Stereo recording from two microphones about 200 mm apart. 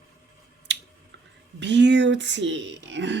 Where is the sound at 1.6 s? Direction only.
60° right (ahead or behind).